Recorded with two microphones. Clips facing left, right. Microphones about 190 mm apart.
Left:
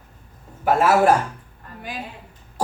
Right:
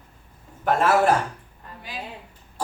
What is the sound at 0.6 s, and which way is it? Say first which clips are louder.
Speech: left 3 dB; 5° left (ahead or behind).